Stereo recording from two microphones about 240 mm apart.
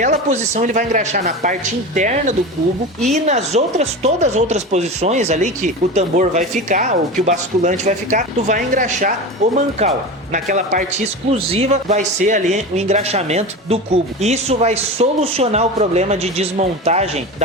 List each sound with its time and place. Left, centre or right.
0.0 s speech: right